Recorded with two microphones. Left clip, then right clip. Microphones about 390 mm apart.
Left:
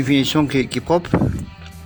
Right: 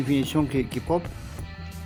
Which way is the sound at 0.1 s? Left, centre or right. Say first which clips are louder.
Left 8 dB; right.